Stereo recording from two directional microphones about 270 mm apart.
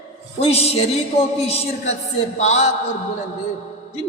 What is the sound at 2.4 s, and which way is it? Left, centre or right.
Speech, left.